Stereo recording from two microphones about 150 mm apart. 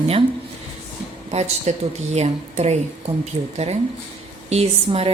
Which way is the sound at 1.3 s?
50° right (ahead or behind).